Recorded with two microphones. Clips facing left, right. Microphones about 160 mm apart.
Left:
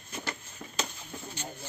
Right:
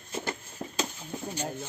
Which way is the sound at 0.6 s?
35° right (ahead or behind).